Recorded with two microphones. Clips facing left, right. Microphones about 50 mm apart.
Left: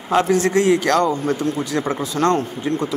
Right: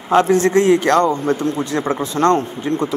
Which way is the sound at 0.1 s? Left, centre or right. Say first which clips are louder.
Right 3 dB; right.